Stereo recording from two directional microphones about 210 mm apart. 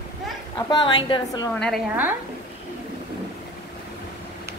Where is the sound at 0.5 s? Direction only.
20° left (ahead or behind).